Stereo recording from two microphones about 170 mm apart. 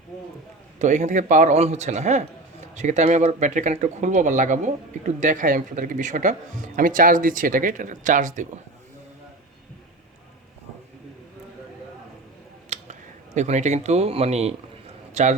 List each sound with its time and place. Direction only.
0.8 s speech: 45° right (ahead or behind)
12.7 s a man's voice: 45° right (ahead or behind)